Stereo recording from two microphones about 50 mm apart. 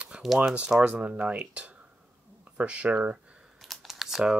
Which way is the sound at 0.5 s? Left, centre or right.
Right.